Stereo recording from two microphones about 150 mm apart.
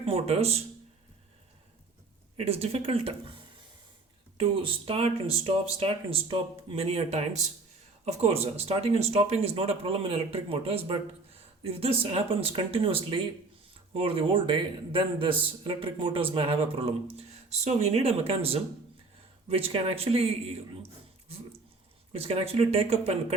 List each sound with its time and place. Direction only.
0.0 s speech: 40° right (ahead or behind)
2.4 s speech: 40° right (ahead or behind)
22.1 s speech: 40° right (ahead or behind)